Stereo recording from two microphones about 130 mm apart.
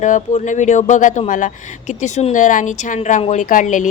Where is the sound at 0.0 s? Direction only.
70° left (ahead or behind).